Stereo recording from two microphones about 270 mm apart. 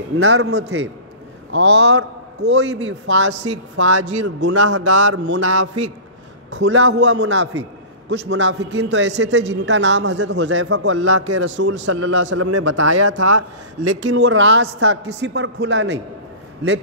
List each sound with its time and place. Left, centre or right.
0.2 s a man's voice: right
4.5 s speech: right
4.8 s a man's voice: right
12.4 s speech: right
13.9 s a man's voice: right